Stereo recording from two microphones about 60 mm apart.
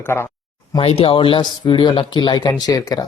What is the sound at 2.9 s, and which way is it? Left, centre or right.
Speech, left.